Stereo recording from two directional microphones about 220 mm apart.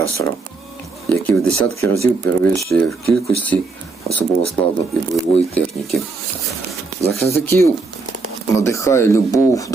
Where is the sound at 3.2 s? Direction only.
5° left (ahead or behind).